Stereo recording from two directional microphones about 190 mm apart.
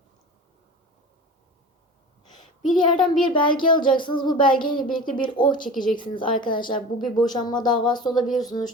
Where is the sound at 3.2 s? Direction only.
25° left (ahead or behind).